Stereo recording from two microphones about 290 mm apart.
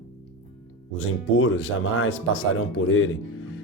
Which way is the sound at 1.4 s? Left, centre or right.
Left.